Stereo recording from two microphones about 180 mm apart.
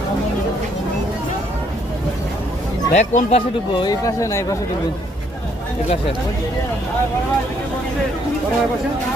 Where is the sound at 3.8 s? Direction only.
20° left (ahead or behind).